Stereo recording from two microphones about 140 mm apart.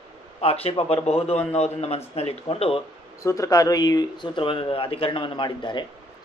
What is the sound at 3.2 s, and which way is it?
Speech, 20° left (ahead or behind).